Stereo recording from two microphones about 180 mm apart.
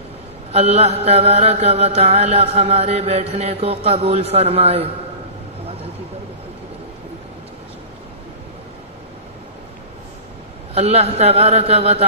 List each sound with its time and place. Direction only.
0.5 s mantra: 35° right (ahead or behind)
10.7 s mantra: 35° right (ahead or behind)